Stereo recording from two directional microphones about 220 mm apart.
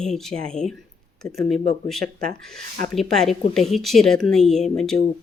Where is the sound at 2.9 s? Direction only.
Centre (ahead or behind).